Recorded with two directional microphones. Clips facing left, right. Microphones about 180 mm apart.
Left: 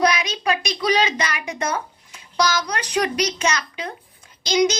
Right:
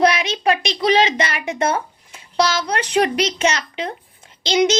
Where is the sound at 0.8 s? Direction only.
25° right (ahead or behind).